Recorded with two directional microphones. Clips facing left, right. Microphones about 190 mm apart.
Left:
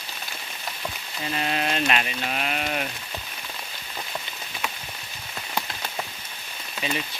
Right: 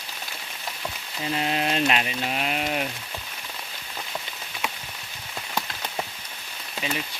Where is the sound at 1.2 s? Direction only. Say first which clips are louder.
Right 1 dB; 15° right (ahead or behind).